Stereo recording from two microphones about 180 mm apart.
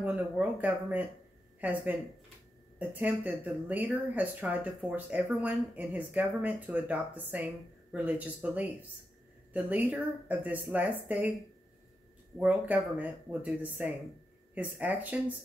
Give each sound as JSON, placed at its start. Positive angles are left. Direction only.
{"t": 0.0, "sound": "speech", "side_deg": -10}
{"t": 12.4, "sound": "speech", "side_deg": -10}